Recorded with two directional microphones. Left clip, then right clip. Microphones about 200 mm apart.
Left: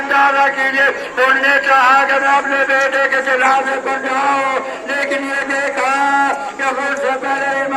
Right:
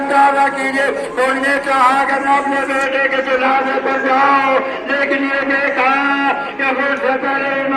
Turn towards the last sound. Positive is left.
turn(degrees=25)  # may be behind; listen again after turning